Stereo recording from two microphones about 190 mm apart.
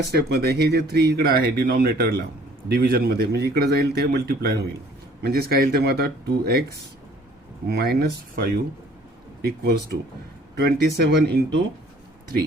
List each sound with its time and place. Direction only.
0.1 s speech: 60° right (ahead or behind)
7.7 s speech: 55° right (ahead or behind)